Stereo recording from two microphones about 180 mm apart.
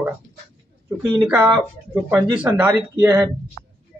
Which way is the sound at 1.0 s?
30° right (ahead or behind).